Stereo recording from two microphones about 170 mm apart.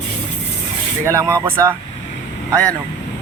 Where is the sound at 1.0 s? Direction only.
20° right (ahead or behind).